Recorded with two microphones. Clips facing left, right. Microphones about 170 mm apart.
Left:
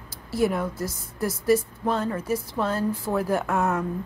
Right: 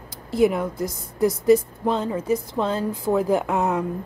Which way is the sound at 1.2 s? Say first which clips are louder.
Right 5 dB; 15° right (ahead or behind).